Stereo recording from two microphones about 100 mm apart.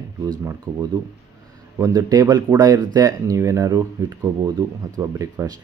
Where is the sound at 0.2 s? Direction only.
35° right (ahead or behind).